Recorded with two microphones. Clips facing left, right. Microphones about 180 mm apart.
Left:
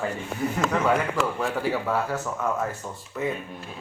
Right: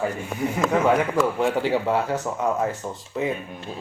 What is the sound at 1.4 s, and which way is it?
Speech, 20° right (ahead or behind).